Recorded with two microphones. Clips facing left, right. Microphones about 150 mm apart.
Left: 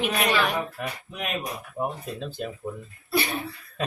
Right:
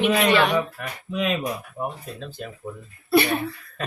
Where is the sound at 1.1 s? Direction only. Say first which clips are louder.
Right 9 dB; 90° right.